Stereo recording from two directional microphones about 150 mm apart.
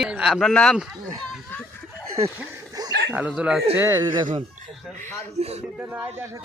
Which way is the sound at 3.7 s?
15° right (ahead or behind).